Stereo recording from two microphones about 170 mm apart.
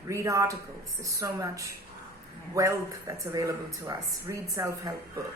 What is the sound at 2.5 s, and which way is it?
Speech, 15° right (ahead or behind).